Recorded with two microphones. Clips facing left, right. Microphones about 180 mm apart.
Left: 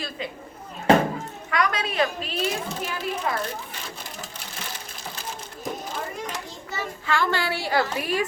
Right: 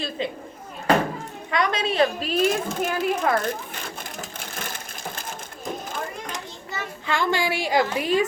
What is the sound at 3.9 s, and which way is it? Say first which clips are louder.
Sewing machine: right 3 dB; 50° right (ahead or behind).